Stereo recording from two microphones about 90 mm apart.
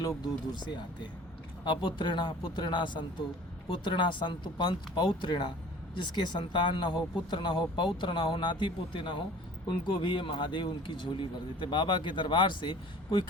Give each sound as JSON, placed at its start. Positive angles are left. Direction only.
{"t": 0.5, "sound": "speech", "side_deg": 55}